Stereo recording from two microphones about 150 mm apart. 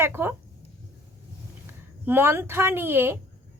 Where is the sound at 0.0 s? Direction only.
15° right (ahead or behind).